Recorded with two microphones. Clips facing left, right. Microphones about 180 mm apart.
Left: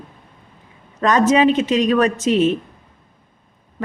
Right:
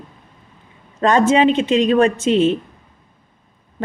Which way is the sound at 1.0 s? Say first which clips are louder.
Right 1 dB; 30° right (ahead or behind).